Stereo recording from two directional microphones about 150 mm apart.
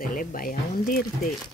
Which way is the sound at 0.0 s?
65° left (ahead or behind).